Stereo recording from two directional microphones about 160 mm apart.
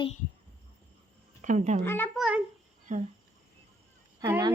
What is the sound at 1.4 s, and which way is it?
Speech, 50° right (ahead or behind).